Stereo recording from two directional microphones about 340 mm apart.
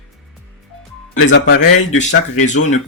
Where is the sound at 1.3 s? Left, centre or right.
Left.